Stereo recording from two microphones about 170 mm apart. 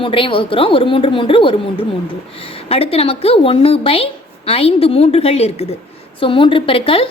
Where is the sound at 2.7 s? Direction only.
35° left (ahead or behind).